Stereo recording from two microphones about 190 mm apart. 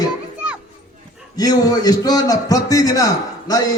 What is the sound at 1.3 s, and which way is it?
A man's voice, 20° left (ahead or behind).